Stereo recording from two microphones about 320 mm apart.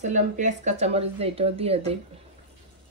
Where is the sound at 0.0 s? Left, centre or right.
Right.